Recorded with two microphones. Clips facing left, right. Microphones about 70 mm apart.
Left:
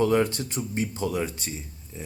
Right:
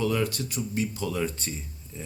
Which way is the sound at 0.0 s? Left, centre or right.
Left.